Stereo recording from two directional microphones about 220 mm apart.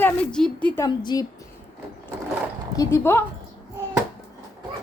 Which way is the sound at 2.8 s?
10° left (ahead or behind).